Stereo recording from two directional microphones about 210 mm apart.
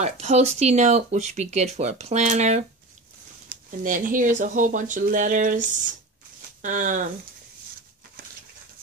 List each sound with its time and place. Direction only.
0.0 s speech: 30° right (ahead or behind)